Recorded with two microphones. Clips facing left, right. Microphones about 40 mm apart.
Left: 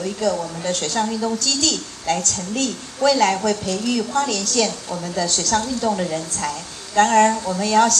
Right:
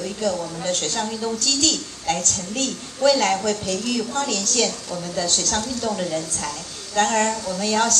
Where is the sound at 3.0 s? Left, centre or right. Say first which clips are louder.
Left 2 dB; left.